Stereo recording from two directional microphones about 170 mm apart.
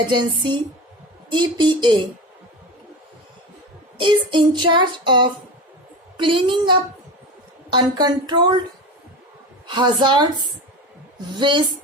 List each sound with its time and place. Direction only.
0.1 s child singing: 25° right (ahead or behind)
3.9 s child singing: 30° right (ahead or behind)
9.6 s child singing: 25° right (ahead or behind)
11.3 s child singing: 25° right (ahead or behind)